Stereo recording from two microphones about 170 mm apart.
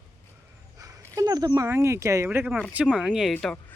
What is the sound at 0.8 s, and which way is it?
Speech, 20° right (ahead or behind).